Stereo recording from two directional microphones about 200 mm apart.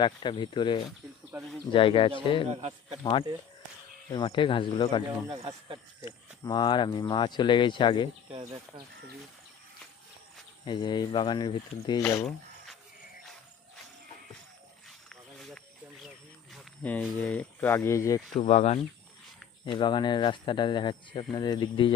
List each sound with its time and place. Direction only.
0.0 s speech: 25° left (ahead or behind)
0.9 s insect: centre (ahead or behind)
1.7 s speech: 25° left (ahead or behind)
2.5 s speech: 30° right (ahead or behind)
3.0 s speech: 25° left (ahead or behind)
5.3 s speech: 30° right (ahead or behind)
6.1 s speech: 20° left (ahead or behind)
8.3 s speech: 25° right (ahead or behind)
10.7 s speech: 25° left (ahead or behind)
12.0 s speech: 10° left (ahead or behind)
14.8 s wild animals: centre (ahead or behind)
16.0 s a sound: 5° left (ahead or behind)
18.3 s speech: 30° left (ahead or behind)